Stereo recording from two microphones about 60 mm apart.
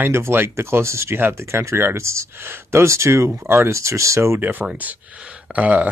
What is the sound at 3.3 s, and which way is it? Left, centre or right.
Speech, right.